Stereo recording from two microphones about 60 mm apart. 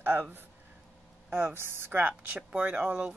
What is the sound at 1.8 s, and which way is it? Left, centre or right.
Speech, right.